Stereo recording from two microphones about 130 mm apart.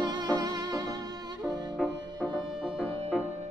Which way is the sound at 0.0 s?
30° right (ahead or behind).